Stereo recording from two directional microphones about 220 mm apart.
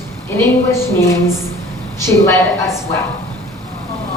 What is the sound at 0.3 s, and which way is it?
Speech, 10° left (ahead or behind).